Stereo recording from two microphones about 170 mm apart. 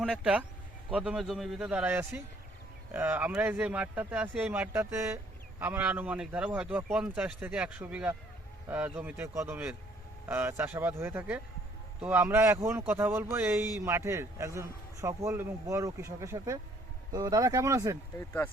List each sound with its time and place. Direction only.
0.0 s speech: 5° right (ahead or behind)
18.2 s speech: 15° left (ahead or behind)